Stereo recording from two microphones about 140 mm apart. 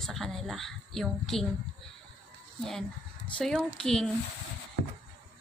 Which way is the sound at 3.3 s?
5° left (ahead or behind).